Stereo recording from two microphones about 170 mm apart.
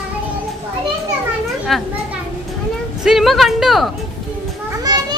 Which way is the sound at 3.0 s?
Centre (ahead or behind).